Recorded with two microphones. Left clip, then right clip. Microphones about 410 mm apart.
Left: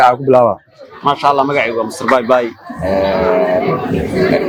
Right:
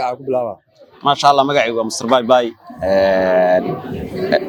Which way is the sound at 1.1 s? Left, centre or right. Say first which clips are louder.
Even; right.